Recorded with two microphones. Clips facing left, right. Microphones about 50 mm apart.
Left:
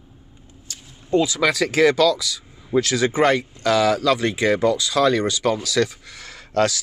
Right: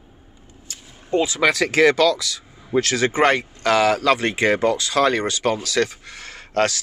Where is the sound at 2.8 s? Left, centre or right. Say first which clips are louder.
Right 1 dB; right.